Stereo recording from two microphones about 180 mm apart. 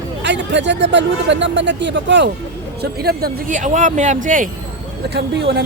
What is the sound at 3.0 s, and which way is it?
Speech, 60° right (ahead or behind).